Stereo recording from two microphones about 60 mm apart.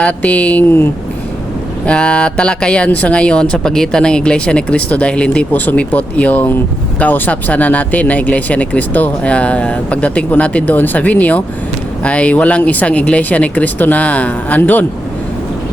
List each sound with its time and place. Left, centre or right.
0.2 s speech: left
1.9 s speech: left